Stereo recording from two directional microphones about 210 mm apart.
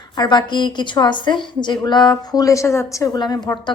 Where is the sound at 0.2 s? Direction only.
20° left (ahead or behind).